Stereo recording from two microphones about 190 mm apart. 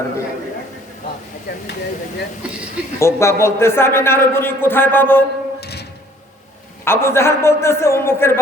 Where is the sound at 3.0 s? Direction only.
15° left (ahead or behind).